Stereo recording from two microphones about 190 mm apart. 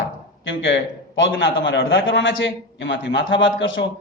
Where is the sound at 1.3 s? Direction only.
80° left.